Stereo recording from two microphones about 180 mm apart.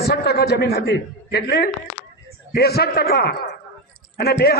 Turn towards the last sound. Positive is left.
turn(degrees=60)  # may be behind; listen again after turning